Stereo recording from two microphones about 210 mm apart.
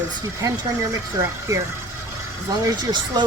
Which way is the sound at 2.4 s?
20° right (ahead or behind).